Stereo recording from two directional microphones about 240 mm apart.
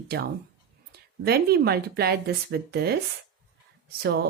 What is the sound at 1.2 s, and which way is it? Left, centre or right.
Speech, right.